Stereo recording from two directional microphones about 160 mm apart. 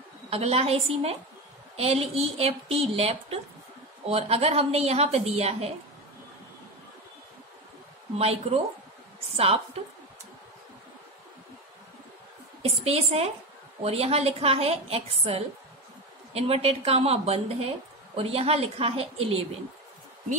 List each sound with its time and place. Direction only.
0.3 s a woman's voice: 40° right (ahead or behind)
8.2 s a woman's voice: 40° right (ahead or behind)
12.6 s a woman's voice: 40° right (ahead or behind)